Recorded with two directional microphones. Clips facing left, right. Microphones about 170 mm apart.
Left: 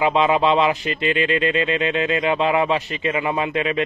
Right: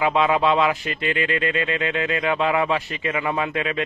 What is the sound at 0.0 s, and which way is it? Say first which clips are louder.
Speech: left 2 dB; 20° left (ahead or behind).